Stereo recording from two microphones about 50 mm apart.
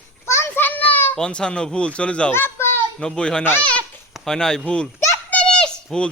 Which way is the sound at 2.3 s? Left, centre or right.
Left.